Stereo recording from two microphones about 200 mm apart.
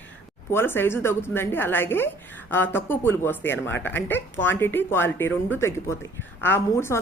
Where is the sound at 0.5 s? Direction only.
10° left (ahead or behind).